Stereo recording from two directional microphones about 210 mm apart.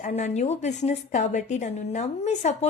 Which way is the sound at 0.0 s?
30° left (ahead or behind).